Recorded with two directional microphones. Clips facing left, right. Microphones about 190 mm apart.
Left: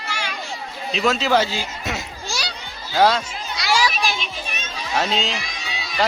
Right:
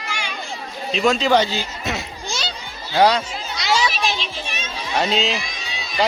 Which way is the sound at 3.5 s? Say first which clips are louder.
Even; 20° right (ahead or behind).